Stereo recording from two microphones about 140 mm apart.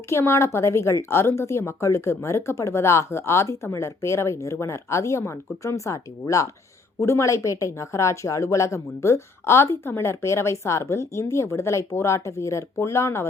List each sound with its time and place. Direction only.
0.1 s a woman's voice: 20° left (ahead or behind)